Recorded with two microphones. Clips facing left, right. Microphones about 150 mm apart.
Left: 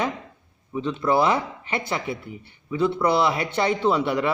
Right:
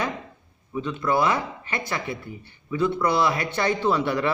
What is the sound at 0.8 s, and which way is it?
Speech, 30° left (ahead or behind).